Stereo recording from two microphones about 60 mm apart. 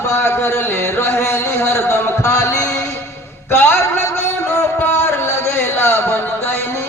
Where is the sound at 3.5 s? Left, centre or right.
Left.